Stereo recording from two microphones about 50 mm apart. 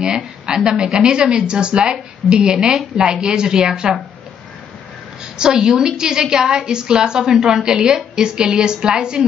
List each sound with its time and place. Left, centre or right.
0.0 s a woman's voice: centre
5.2 s a woman's voice: centre